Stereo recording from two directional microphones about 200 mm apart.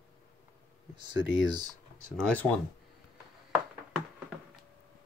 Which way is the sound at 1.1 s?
20° right (ahead or behind).